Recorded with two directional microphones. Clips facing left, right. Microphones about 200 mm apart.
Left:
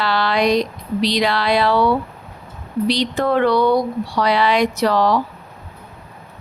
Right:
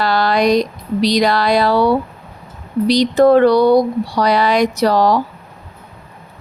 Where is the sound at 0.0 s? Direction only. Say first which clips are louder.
Right 3 dB; 40° right (ahead or behind).